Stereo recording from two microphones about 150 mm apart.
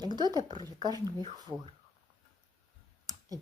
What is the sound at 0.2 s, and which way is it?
Speech, 25° right (ahead or behind).